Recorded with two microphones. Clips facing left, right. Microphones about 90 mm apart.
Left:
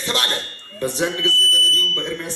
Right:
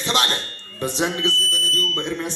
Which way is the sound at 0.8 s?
20° right (ahead or behind).